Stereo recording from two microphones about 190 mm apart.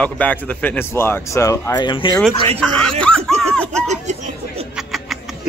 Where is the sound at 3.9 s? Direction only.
40° right (ahead or behind).